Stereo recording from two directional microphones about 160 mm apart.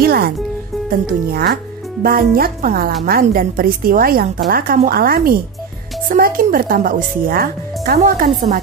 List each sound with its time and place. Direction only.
0.0 s music: 75° right (ahead or behind)
0.8 s speech: 65° right (ahead or behind)
2.0 s a woman's voice: 65° right (ahead or behind)